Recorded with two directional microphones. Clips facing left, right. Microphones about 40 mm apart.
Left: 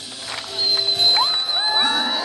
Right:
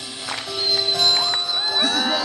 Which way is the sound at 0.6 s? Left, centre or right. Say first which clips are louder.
Left 1 dB; centre.